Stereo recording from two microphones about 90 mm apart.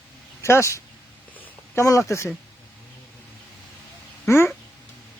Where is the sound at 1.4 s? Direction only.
30° left (ahead or behind).